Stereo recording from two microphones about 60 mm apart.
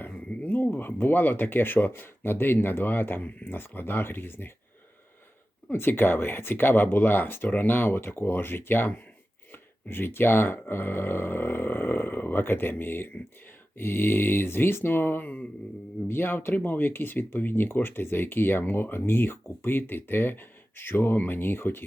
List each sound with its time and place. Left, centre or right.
0.1 s a sound: left
0.7 s speech: left
5.7 s speech: left